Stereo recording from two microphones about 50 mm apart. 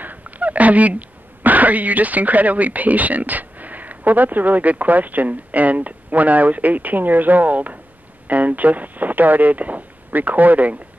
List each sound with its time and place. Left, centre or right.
0.0 s speech: right